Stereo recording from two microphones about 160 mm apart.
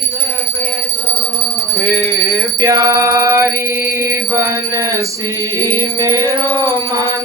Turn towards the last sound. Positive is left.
turn(degrees=-20)  # may be behind; listen again after turning